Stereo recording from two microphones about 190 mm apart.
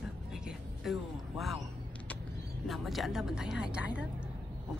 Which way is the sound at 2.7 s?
Centre (ahead or behind).